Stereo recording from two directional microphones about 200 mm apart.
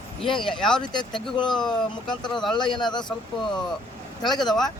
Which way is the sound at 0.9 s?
20° left (ahead or behind).